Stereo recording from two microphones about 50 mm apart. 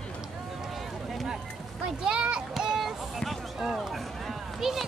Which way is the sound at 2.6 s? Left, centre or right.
Centre.